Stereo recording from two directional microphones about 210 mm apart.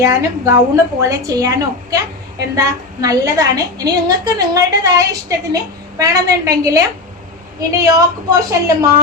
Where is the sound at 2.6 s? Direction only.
15° right (ahead or behind).